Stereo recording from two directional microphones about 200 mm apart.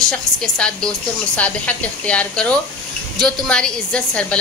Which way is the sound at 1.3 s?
5° left (ahead or behind).